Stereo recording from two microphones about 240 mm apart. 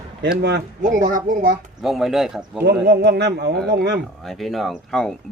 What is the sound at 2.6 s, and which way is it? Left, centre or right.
Speech, right.